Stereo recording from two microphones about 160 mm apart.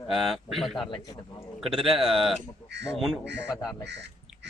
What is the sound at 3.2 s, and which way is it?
Speech, 90° right.